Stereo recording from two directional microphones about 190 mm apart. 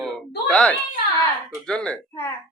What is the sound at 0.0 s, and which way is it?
Baby cry, 5° left (ahead or behind).